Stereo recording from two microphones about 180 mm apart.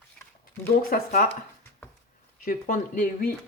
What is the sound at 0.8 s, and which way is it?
Speech, 50° left (ahead or behind).